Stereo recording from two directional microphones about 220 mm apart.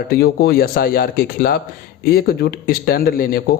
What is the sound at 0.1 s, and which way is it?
Speech, 45° left (ahead or behind).